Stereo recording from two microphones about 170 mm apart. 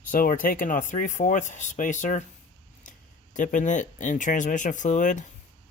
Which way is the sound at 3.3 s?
50° left (ahead or behind).